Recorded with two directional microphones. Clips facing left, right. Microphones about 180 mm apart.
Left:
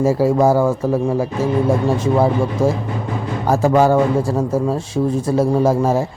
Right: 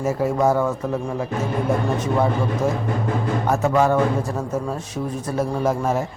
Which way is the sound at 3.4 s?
35° left (ahead or behind).